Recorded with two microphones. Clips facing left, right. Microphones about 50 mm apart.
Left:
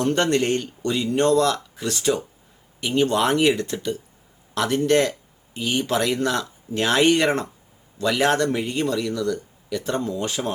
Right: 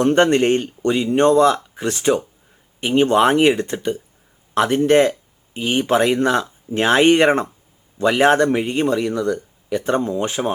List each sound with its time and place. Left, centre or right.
0.0 s speech: right